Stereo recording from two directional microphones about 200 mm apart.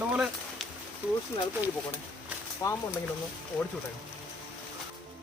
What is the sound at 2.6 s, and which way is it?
Speech, 15° left (ahead or behind).